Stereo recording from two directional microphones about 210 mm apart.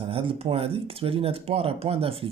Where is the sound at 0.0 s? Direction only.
25° right (ahead or behind).